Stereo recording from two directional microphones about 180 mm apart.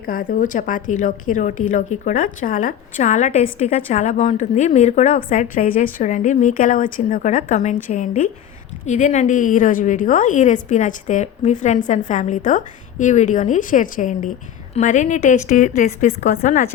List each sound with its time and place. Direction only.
0.0 s a woman's voice: 50° left (ahead or behind)